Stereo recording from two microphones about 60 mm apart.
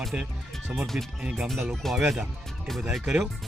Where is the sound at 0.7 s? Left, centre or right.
Centre.